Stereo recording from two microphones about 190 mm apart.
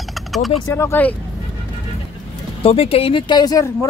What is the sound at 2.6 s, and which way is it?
Speech, 30° left (ahead or behind).